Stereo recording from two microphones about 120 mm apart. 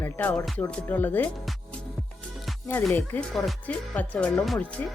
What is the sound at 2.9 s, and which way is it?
Speech, 15° left (ahead or behind).